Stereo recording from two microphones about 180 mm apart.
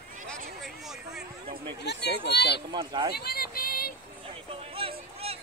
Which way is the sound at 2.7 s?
25° right (ahead or behind).